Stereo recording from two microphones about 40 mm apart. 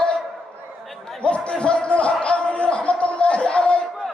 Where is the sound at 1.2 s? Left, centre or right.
Left.